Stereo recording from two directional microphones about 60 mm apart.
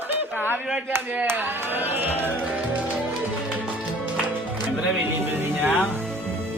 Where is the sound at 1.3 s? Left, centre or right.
Right.